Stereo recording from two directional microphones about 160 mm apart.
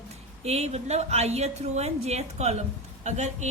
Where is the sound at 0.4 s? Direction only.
40° right (ahead or behind).